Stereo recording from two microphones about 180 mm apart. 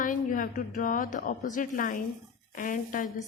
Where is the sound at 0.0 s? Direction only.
45° left (ahead or behind).